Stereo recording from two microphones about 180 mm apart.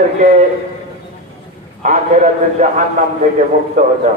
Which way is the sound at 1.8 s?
40° right (ahead or behind).